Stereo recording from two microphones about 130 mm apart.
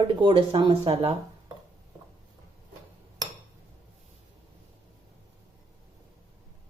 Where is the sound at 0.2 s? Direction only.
40° right (ahead or behind).